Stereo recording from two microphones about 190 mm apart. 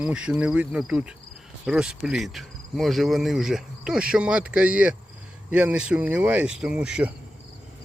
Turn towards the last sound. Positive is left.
turn(degrees=-5)  # may be behind; listen again after turning